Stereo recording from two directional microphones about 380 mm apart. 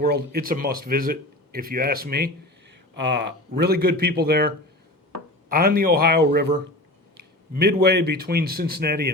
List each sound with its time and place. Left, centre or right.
0.0 s speech: right